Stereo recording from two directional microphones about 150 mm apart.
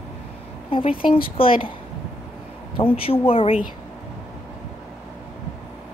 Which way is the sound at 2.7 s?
40° left (ahead or behind).